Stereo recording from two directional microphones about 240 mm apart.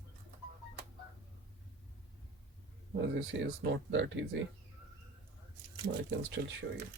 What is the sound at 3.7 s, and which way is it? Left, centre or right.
Speech, right.